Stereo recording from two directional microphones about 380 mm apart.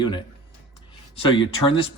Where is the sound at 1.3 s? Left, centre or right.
Centre.